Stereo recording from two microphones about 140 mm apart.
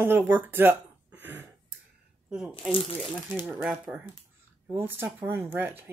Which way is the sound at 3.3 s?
15° right (ahead or behind).